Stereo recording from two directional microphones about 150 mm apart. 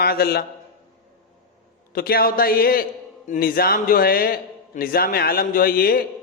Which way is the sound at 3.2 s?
65° left (ahead or behind).